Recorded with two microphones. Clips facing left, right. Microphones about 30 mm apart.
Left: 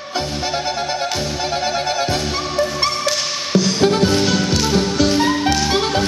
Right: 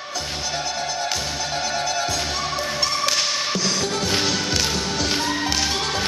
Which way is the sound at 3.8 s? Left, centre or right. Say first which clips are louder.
Left 9 dB; left.